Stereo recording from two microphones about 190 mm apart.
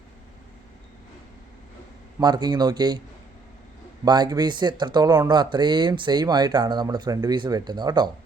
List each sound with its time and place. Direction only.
2.1 s speech: 20° right (ahead or behind)
4.0 s speech: 20° right (ahead or behind)